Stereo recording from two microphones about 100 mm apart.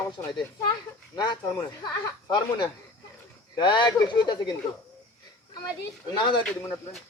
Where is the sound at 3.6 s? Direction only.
50° left (ahead or behind).